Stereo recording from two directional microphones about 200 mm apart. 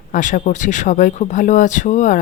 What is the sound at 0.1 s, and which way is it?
Speech, 40° left (ahead or behind).